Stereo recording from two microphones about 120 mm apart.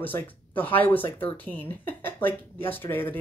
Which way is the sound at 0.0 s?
15° left (ahead or behind).